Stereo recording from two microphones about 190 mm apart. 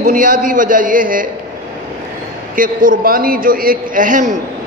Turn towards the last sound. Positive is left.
turn(degrees=-40)  # may be behind; listen again after turning